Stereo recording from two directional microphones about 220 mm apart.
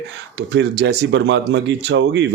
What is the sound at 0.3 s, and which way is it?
Speech, 50° right (ahead or behind).